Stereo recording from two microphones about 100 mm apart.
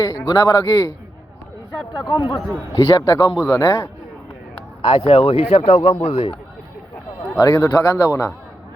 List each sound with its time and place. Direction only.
0.3 s speech: 40° left (ahead or behind)
2.0 s a man's voice: 45° left (ahead or behind)
2.7 s speech: 35° left (ahead or behind)
3.3 s a man's voice: 15° right (ahead or behind)
3.6 s a man's voice: 30° left (ahead or behind)
4.8 s a man's voice: 65° left (ahead or behind); by 6.3 s 90° left
7.3 s speech: 35° left (ahead or behind)